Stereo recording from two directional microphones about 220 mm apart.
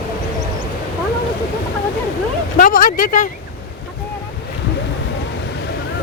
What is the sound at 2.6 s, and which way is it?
Speech, 40° left (ahead or behind).